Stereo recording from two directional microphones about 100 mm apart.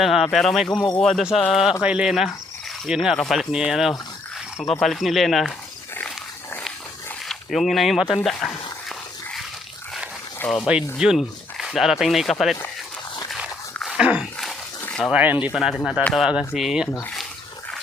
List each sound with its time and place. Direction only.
0.0 s speech: 5° right (ahead or behind)
0.7 s speech: 45° left (ahead or behind)
1.0 s speech: 5° right (ahead or behind)
7.3 s speech: centre (ahead or behind)
10.7 s speech: 10° right (ahead or behind)
13.8 s a sound: 10° right (ahead or behind)
15.1 s speech: 15° right (ahead or behind)
15.5 s speech: 5° right (ahead or behind)